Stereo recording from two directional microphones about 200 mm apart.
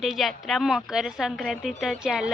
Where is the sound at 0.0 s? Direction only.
Centre (ahead or behind).